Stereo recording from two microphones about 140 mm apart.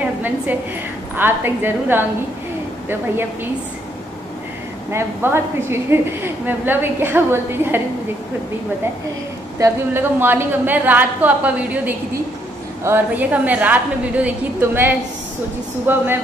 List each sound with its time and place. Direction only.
0.0 s a sound: 10° right (ahead or behind)
1.1 s a woman's voice: 15° right (ahead or behind)
4.9 s a woman's voice: 15° right (ahead or behind)
9.6 s a woman's voice: 15° right (ahead or behind)